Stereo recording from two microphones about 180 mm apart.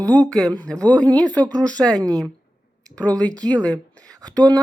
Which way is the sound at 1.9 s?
20° right (ahead or behind).